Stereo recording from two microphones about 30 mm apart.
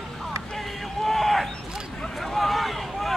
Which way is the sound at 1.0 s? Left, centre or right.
Centre.